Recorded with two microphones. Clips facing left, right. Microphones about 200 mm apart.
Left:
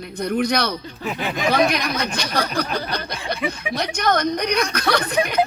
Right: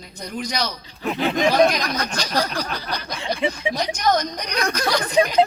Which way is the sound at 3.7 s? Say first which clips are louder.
Left 4 dB; 60° left (ahead or behind).